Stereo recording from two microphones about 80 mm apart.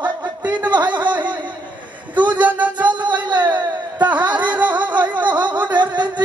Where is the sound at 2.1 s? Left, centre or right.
Right.